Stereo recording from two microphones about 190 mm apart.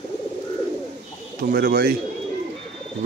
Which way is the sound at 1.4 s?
50° right (ahead or behind).